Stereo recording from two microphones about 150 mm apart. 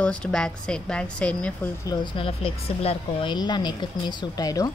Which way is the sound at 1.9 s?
35° left (ahead or behind).